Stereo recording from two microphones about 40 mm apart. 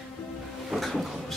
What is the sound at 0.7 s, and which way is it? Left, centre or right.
Speech, centre.